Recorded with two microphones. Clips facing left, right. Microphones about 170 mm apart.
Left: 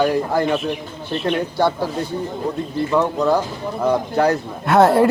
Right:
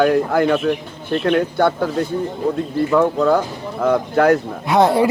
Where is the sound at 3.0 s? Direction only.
55° right (ahead or behind).